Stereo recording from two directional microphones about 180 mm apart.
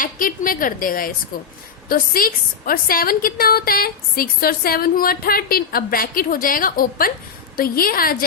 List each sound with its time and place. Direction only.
0.0 s a woman's voice: 50° left (ahead or behind)